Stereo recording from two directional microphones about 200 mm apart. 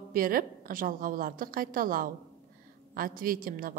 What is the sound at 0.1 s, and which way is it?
A woman's voice, 45° right (ahead or behind).